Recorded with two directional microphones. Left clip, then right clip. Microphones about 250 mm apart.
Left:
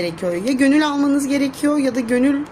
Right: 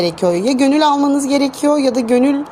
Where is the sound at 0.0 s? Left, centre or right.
Right.